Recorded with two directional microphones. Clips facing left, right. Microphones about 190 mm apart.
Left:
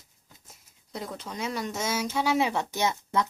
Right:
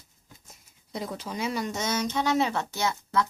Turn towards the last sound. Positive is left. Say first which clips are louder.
# even
turn(degrees=20)  # may be behind; listen again after turning